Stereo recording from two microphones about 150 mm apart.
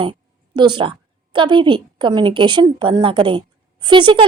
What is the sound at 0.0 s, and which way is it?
A woman's voice, 30° right (ahead or behind).